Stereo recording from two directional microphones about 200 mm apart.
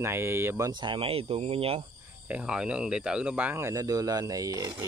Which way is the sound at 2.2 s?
5° right (ahead or behind).